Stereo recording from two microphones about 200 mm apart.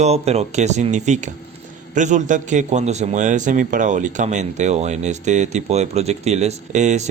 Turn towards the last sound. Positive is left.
turn(degrees=-35)  # may be behind; listen again after turning